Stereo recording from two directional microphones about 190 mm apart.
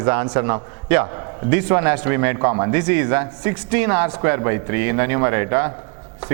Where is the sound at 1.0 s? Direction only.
25° right (ahead or behind).